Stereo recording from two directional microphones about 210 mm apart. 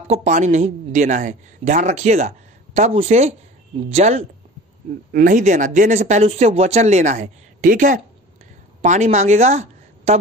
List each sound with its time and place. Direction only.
0.1 s speech: 35° right (ahead or behind)